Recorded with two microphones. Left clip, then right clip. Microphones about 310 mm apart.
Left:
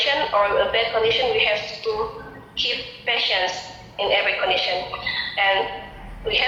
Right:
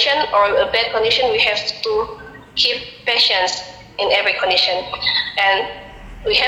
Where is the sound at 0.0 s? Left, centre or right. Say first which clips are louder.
Right 5 dB; right.